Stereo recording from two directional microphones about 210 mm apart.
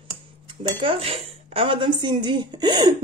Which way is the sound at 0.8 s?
25° right (ahead or behind).